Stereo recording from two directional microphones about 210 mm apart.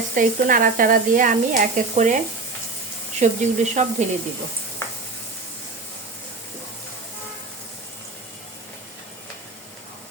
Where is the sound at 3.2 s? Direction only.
35° right (ahead or behind).